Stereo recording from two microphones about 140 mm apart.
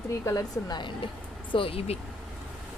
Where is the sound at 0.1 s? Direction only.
25° left (ahead or behind).